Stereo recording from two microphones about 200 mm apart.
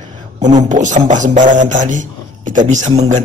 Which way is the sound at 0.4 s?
40° right (ahead or behind).